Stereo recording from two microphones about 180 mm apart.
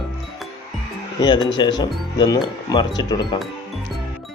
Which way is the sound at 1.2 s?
25° left (ahead or behind).